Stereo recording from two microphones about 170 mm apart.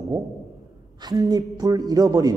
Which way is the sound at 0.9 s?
20° right (ahead or behind).